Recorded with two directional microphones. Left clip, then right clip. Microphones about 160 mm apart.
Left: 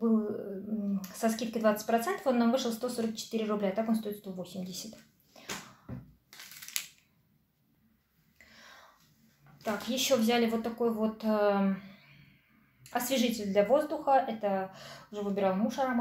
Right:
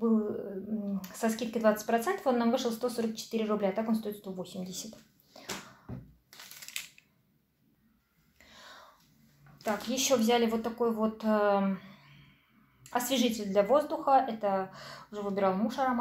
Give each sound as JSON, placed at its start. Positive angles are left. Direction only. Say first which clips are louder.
{"t": 0.0, "sound": "dog", "louder": "right 1 dB", "side_deg": -15}
{"t": 0.8, "sound": "speech", "louder": "left 2 dB", "side_deg": -15}
{"t": 6.3, "sound": "crushing", "louder": "left 1 dB", "side_deg": -10}
{"t": 9.6, "sound": "speech", "louder": "right 1 dB", "side_deg": -15}
{"t": 12.9, "sound": "speech", "louder": "right 1 dB", "side_deg": -10}